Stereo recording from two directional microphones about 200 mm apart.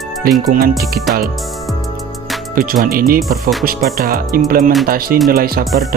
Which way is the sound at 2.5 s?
45° right (ahead or behind).